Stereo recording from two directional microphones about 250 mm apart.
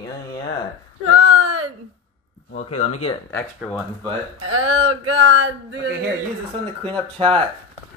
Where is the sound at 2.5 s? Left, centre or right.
Left.